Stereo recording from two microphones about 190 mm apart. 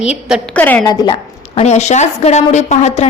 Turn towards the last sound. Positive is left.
turn(degrees=35)  # may be behind; listen again after turning